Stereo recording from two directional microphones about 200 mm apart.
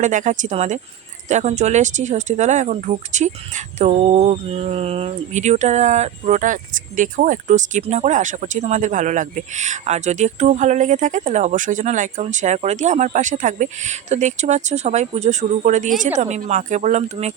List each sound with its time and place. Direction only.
0.0 s speech: 40° right (ahead or behind)